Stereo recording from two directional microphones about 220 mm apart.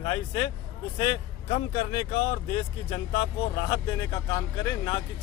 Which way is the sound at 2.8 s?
25° left (ahead or behind).